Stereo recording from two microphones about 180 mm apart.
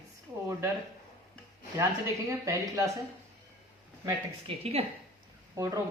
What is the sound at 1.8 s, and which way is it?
Speech, 15° right (ahead or behind).